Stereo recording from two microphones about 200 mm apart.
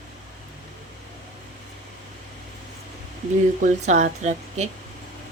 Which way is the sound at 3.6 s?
35° right (ahead or behind).